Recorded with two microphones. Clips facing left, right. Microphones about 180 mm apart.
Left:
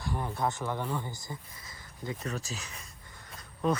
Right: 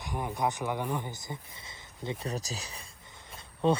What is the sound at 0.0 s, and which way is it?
Speech, 15° right (ahead or behind).